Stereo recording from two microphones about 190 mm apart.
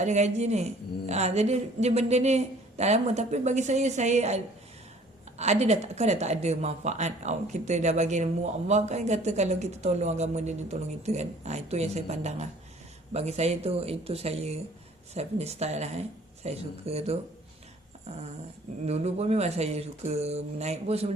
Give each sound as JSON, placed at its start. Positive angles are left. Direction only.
{"t": 0.0, "sound": "speech", "side_deg": -40}
{"t": 5.4, "sound": "speech", "side_deg": -35}
{"t": 18.9, "sound": "speech", "side_deg": -35}